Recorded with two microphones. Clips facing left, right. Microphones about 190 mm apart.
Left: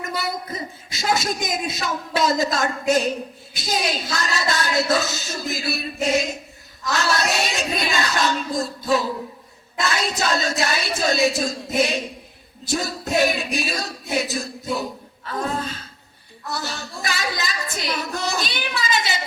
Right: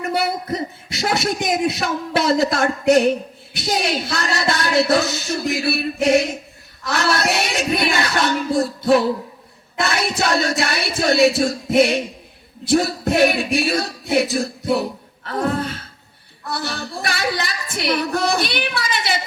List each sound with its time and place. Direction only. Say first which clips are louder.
0.3 s music: right 5 dB; 65° right (ahead or behind)